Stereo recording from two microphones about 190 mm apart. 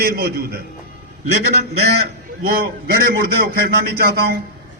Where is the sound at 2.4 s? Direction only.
55° right (ahead or behind).